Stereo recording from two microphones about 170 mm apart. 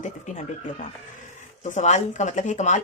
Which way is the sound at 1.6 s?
45° left (ahead or behind).